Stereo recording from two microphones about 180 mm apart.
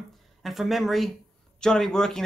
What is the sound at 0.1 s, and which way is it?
Speech, centre (ahead or behind).